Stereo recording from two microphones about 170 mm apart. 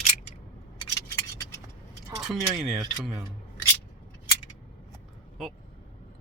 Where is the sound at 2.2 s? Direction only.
Centre (ahead or behind).